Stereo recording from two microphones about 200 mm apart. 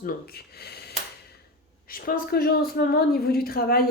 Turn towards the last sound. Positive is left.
turn(degrees=50)  # may be behind; listen again after turning